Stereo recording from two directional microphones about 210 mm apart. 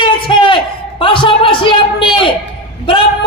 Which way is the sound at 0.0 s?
25° left (ahead or behind).